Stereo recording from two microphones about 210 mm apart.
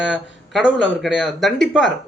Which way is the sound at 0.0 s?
5° right (ahead or behind).